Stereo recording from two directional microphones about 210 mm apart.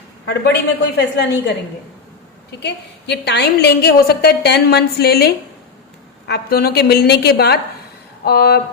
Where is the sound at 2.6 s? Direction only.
55° left (ahead or behind).